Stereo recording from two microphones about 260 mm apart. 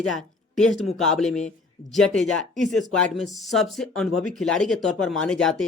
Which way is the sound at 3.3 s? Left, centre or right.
Centre.